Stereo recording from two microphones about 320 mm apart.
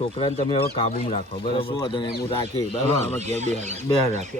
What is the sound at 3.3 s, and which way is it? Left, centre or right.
Speech, right.